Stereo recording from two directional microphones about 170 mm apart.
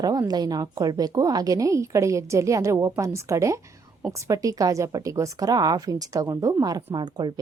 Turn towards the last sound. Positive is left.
turn(degrees=-25)  # may be behind; listen again after turning